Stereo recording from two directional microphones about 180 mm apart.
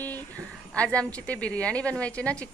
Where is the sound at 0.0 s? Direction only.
10° left (ahead or behind).